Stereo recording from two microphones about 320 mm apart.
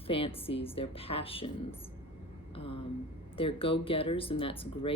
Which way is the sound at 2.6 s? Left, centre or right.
Centre.